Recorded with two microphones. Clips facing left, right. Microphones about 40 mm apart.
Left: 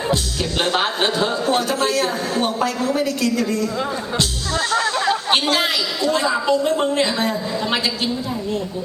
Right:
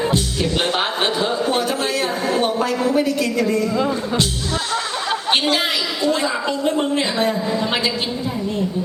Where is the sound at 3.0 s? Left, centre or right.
Centre.